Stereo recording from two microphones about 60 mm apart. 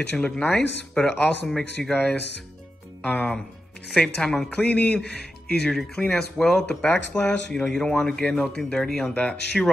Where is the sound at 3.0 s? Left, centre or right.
Left.